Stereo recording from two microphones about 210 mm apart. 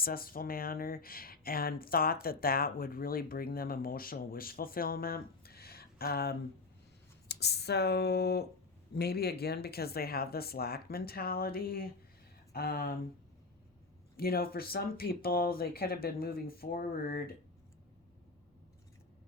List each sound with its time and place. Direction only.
0.0 s speech: 45° left (ahead or behind)
14.2 s speech: 45° left (ahead or behind)